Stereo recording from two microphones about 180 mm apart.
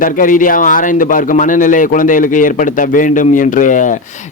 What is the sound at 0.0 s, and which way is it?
Speech, 45° left (ahead or behind).